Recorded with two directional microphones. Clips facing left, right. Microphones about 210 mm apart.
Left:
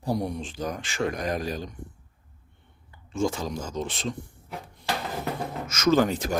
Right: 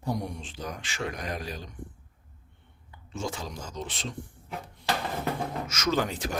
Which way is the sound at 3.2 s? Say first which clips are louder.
Left 8 dB; 45° left (ahead or behind).